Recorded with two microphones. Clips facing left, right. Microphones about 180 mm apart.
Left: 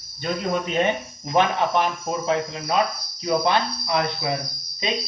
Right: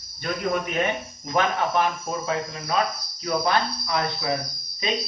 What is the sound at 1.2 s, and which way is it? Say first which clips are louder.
Speech: left 3 dB; 20° left (ahead or behind).